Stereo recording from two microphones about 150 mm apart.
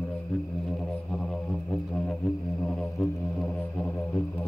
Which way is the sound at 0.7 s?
5° left (ahead or behind).